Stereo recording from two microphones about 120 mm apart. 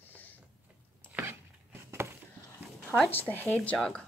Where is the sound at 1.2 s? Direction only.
20° right (ahead or behind).